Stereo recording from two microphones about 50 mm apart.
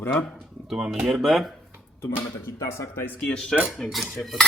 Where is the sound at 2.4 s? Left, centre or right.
Left.